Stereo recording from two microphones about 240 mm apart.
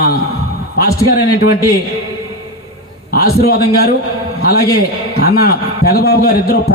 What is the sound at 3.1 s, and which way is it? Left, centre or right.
A man's voice, left.